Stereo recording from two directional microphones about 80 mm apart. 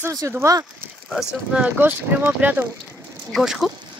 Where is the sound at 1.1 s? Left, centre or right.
Centre; by 2.7 s right.